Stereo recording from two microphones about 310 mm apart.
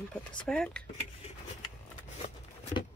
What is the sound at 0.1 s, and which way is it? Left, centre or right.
Speech, centre.